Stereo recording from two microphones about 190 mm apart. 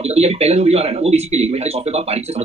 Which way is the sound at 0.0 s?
30° right (ahead or behind).